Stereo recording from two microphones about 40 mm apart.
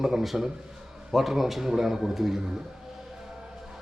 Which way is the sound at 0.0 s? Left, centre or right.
Centre.